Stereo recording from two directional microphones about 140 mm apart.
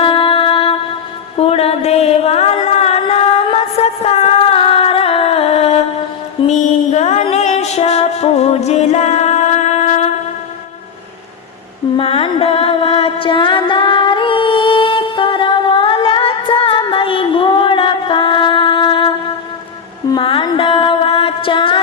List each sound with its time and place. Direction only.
0.0 s music: 40° left (ahead or behind)
11.9 s music: 40° left (ahead or behind)